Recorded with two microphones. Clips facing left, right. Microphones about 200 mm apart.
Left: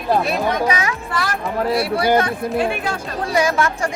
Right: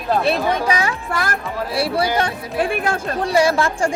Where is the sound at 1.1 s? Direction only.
50° right (ahead or behind).